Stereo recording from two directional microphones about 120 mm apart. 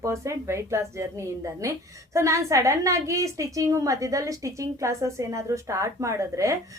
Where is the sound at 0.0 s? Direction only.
25° right (ahead or behind).